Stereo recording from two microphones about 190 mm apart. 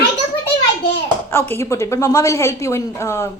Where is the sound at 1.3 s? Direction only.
15° left (ahead or behind).